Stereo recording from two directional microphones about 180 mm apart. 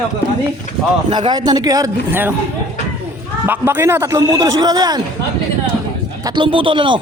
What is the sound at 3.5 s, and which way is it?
A man's voice, 10° right (ahead or behind).